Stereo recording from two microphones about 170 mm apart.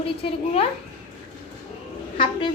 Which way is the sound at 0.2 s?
35° left (ahead or behind).